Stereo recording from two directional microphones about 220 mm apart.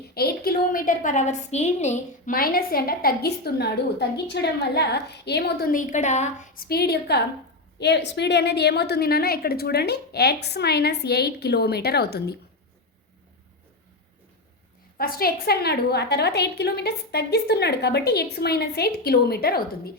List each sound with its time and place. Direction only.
0.1 s a woman's voice: 45° left (ahead or behind)
14.9 s a woman's voice: 40° left (ahead or behind)